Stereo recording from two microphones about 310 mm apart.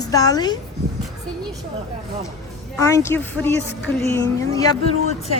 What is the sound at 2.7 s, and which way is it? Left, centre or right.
Speech, centre.